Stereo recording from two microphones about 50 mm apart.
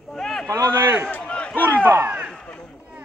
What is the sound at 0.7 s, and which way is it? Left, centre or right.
Speech, right.